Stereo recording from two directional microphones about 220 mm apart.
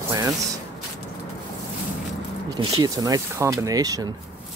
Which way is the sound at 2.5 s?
20° right (ahead or behind).